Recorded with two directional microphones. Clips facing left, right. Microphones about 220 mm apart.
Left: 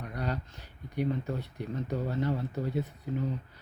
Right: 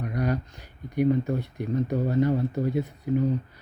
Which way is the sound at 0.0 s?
10° right (ahead or behind).